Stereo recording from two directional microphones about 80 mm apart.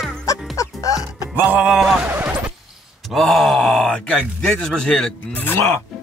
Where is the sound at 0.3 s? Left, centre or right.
Left.